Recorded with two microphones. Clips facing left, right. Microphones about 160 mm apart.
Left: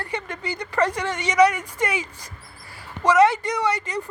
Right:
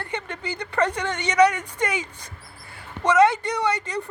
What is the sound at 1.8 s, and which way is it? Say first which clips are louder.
Speech: left 1 dB; 30° left (ahead or behind).